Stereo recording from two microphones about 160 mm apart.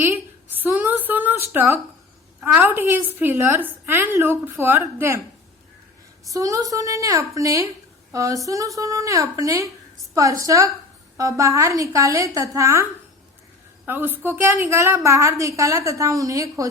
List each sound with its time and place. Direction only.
0.5 s a sound: 10° right (ahead or behind)
2.4 s a woman's voice: 10° right (ahead or behind)
6.2 s a woman's voice: 20° right (ahead or behind)